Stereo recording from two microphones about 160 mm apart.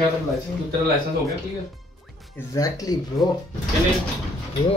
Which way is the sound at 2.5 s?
20° left (ahead or behind).